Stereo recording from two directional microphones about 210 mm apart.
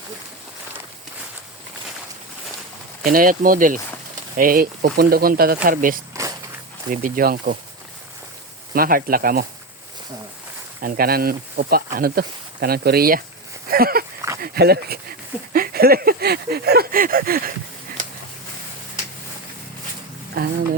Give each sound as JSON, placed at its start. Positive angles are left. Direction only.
{"t": 3.0, "sound": "speech", "side_deg": -40}
{"t": 8.7, "sound": "speech", "side_deg": -45}
{"t": 10.8, "sound": "speech", "side_deg": -45}
{"t": 20.4, "sound": "speech", "side_deg": -45}